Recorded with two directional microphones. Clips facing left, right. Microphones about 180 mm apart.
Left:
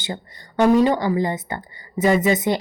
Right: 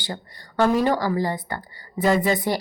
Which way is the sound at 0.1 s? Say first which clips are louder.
Left 3 dB; 20° left (ahead or behind).